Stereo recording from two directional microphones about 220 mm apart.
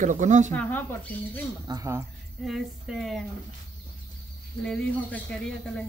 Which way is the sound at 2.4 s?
Centre (ahead or behind).